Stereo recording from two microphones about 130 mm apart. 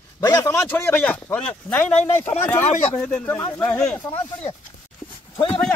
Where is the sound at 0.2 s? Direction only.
25° left (ahead or behind).